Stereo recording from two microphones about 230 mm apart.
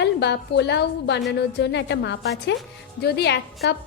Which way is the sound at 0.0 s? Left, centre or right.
Left.